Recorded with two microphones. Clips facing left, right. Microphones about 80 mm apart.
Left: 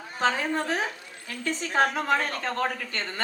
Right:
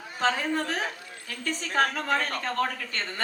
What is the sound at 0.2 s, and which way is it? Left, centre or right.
A woman's voice, left.